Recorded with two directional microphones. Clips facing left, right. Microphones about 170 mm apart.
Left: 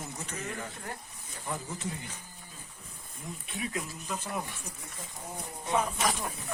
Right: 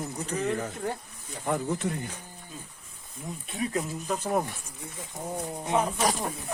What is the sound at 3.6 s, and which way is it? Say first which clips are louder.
Speech: right 7 dB; 40° right (ahead or behind).